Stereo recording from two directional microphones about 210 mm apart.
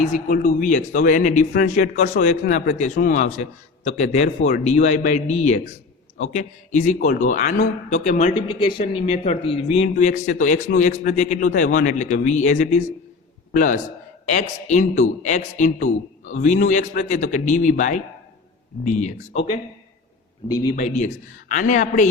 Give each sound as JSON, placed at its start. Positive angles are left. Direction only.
{"t": 0.0, "sound": "a man's voice", "side_deg": 35}
{"t": 6.8, "sound": "a man's voice", "side_deg": 35}
{"t": 8.5, "sound": "a man's voice", "side_deg": 25}
{"t": 20.7, "sound": "a man's voice", "side_deg": 35}